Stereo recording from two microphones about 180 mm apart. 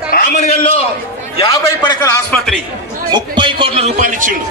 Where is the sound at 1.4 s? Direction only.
20° left (ahead or behind).